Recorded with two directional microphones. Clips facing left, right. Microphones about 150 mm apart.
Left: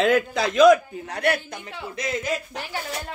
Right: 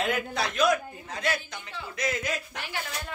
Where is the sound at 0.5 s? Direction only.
90° left; by 1.6 s 65° left (ahead or behind).